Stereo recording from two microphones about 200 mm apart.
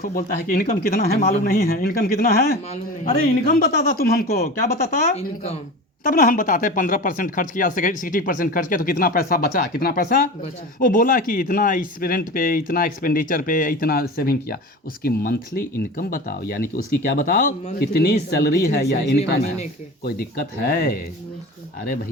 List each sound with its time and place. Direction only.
0.0 s speech: 45° left (ahead or behind)